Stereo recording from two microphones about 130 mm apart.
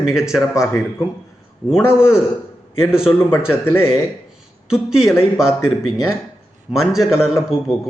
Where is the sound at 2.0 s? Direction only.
5° right (ahead or behind).